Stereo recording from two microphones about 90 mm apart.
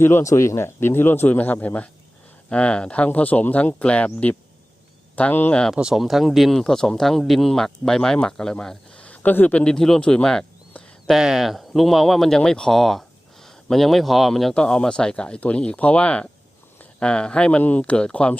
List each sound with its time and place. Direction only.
0.0 s speech: 30° left (ahead or behind); by 5.7 s 15° left (ahead or behind)
5.7 s speech: 5° right (ahead or behind)
11.1 s speech: 5° right (ahead or behind); by 18.3 s 10° left (ahead or behind)